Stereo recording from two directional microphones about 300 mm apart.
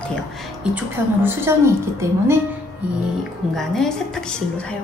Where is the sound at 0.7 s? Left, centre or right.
Centre.